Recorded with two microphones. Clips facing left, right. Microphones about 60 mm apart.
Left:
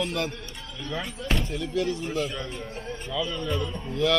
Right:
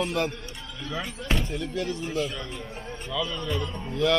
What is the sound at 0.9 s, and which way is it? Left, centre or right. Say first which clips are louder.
Speech: even; centre.